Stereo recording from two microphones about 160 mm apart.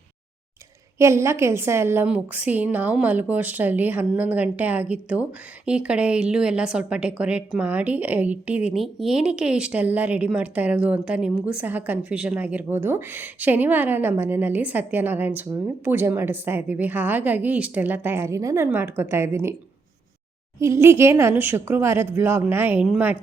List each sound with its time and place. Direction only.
0.9 s a woman's voice: 15° right (ahead or behind)
20.6 s a woman's voice: 15° right (ahead or behind)